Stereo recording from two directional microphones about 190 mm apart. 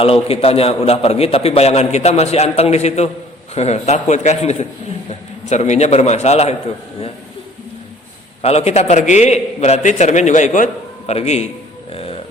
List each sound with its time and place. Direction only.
0.0 s a man's voice: 30° left (ahead or behind)
8.4 s a man's voice: 35° left (ahead or behind)
11.9 s music: 30° left (ahead or behind)